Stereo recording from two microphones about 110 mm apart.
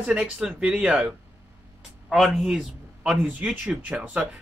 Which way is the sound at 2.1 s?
Centre (ahead or behind).